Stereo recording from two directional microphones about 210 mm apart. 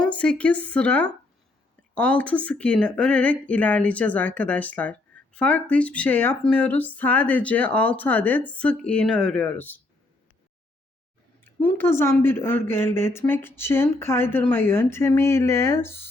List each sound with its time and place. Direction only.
0.0 s speech: 5° left (ahead or behind)
11.4 s speech: 10° left (ahead or behind)